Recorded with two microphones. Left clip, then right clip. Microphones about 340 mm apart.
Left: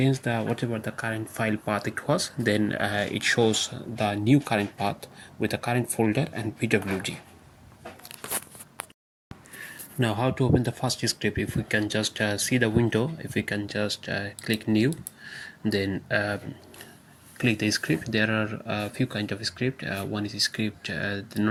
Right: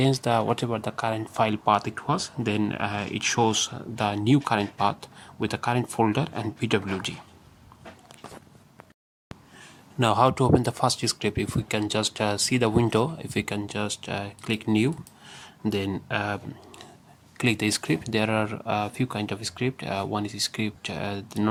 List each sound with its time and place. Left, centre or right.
0.8 s speech: centre
5.9 s speech: right
6.1 s speech: centre
8.3 s a sound: left
10.2 s speech: centre
15.2 s a sound: centre
16.0 s speech: centre